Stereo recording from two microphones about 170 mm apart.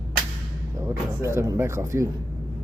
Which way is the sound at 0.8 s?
15° right (ahead or behind).